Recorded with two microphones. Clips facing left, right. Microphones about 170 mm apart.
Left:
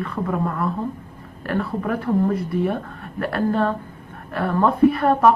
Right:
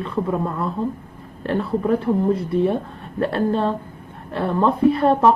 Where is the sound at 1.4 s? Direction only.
25° right (ahead or behind).